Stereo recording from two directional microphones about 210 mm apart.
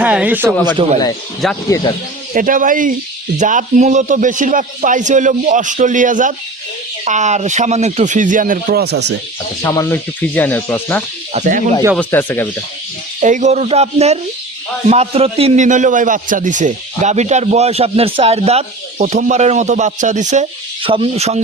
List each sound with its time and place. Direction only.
0.0 s a man's voice: 5° right (ahead or behind)
1.7 s speech: 15° left (ahead or behind)
2.3 s a man's voice: 40° right (ahead or behind)
9.6 s speech: 15° left (ahead or behind)
11.3 s a man's voice: 40° right (ahead or behind)
11.9 s speech: 10° left (ahead or behind)
13.2 s a man's voice: 35° right (ahead or behind)